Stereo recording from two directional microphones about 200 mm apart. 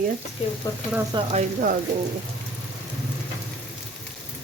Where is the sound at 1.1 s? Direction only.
35° right (ahead or behind).